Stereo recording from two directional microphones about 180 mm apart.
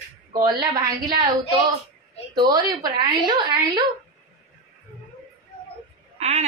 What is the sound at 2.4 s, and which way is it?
Speech, 20° right (ahead or behind).